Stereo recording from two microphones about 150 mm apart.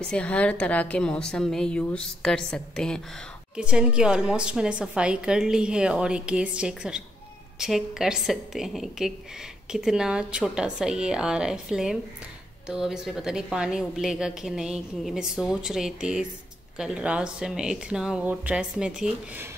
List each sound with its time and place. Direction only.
0.0 s a woman's voice: 5° left (ahead or behind)
3.5 s a woman's voice: 5° right (ahead or behind)